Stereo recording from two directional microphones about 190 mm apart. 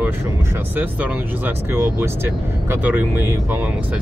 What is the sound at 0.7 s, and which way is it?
Speech, 10° right (ahead or behind).